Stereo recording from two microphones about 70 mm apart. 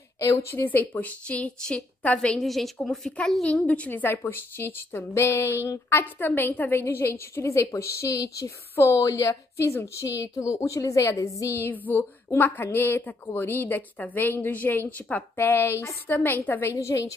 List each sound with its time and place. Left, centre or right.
0.2 s a woman's voice: left
0.6 s a woman's voice: left
2.4 s a woman's voice: centre
3.4 s a woman's voice: centre; by 8.5 s left
8.7 s a woman's voice: left
11.6 s a woman's voice: left
12.0 s a woman's voice: left
15.3 s a woman's voice: left